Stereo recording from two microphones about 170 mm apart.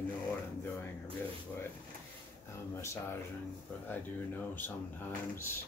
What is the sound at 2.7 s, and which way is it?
Speech, 15° left (ahead or behind).